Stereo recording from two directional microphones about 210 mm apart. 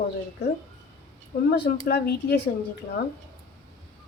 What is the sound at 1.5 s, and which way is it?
Speech, 55° left (ahead or behind).